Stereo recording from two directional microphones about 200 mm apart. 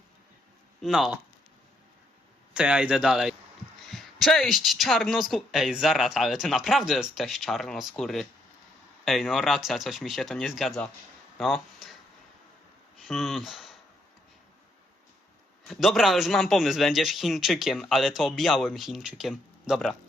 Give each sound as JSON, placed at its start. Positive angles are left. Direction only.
{"t": 0.8, "sound": "speech", "side_deg": 0}
{"t": 2.5, "sound": "speech", "side_deg": -5}
{"t": 13.0, "sound": "speech", "side_deg": 0}
{"t": 15.7, "sound": "speech", "side_deg": 0}